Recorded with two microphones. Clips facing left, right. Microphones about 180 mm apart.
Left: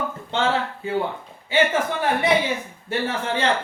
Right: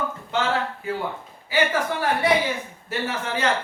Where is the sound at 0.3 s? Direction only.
30° left (ahead or behind).